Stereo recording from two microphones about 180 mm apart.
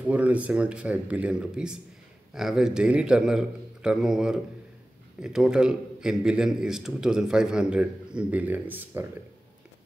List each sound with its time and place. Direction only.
0.0 s a man's voice: 5° right (ahead or behind)